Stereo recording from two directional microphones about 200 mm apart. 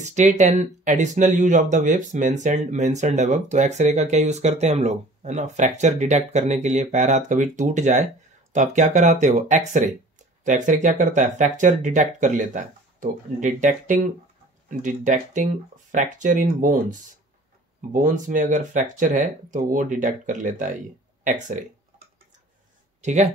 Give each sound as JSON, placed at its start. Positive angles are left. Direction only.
{"t": 0.0, "sound": "speech", "side_deg": -35}
{"t": 17.9, "sound": "speech", "side_deg": -40}
{"t": 23.0, "sound": "speech", "side_deg": -35}